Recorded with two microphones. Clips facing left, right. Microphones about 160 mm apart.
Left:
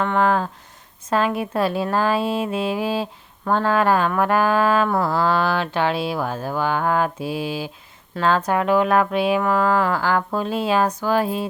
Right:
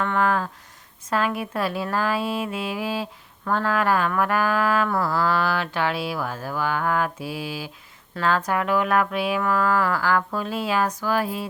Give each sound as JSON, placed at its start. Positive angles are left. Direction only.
{"t": 0.0, "sound": "speech", "side_deg": 25}